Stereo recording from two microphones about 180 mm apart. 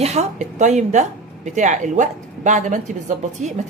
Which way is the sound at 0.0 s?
40° right (ahead or behind).